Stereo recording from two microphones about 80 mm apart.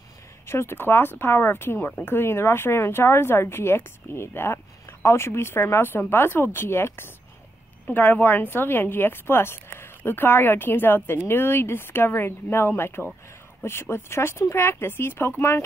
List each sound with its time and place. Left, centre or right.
0.5 s speech: left